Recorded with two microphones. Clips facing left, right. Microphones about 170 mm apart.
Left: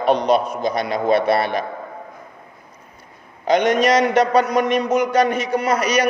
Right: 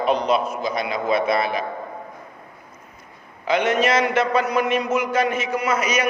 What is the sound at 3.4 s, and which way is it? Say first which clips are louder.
A man's voice: left 4 dB; 35° left (ahead or behind).